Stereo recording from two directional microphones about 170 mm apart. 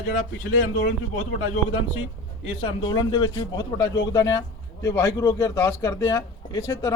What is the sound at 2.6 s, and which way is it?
Speech, 30° left (ahead or behind).